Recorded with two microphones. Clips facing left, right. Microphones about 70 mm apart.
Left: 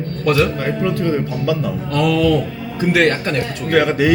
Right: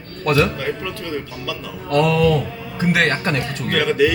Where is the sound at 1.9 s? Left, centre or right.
Centre.